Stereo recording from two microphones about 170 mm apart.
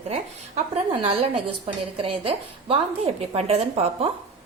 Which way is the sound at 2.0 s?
30° right (ahead or behind).